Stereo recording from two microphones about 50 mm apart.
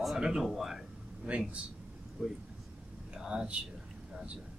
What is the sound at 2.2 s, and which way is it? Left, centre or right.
Speech, centre.